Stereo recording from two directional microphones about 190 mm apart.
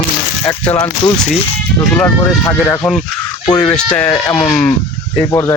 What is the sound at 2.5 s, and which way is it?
Speech, 15° left (ahead or behind).